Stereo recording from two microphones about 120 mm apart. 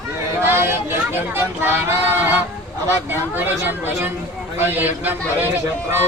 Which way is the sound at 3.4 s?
15° right (ahead or behind).